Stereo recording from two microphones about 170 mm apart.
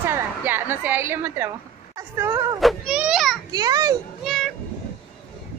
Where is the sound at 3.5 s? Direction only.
25° right (ahead or behind).